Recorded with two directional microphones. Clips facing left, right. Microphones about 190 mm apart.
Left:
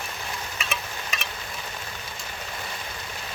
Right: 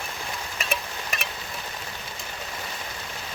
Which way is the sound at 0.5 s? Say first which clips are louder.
Right 2 dB; 55° right (ahead or behind).